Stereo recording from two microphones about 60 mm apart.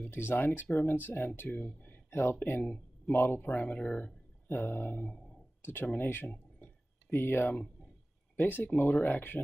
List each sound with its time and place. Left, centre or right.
0.1 s speech: left
3.3 s speech: left
4.5 s speech: left
6.6 s a sound: left
8.4 s speech: left